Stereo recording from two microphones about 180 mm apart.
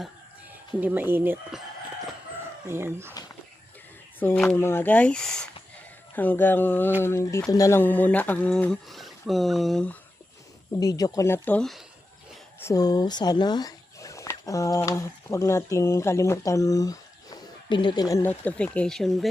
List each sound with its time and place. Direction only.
0.8 s speech: 10° right (ahead or behind)
2.6 s speech: 15° right (ahead or behind)
4.2 s speech: 10° left (ahead or behind)
10.8 s speech: 20° left (ahead or behind); by 11.8 s 5° left (ahead or behind)
12.5 s speech: 15° left (ahead or behind)
18.1 s speech: 10° left (ahead or behind)